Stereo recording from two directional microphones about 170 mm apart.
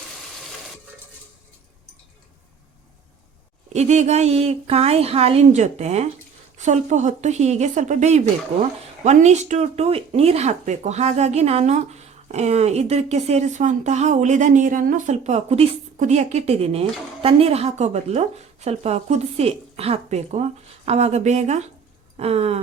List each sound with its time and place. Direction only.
3.7 s a woman's voice: 40° right (ahead or behind)